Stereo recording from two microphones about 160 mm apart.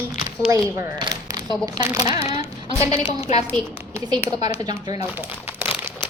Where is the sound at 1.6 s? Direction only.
25° right (ahead or behind).